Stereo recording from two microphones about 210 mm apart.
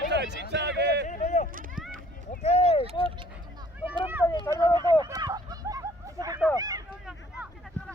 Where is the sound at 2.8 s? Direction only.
25° right (ahead or behind).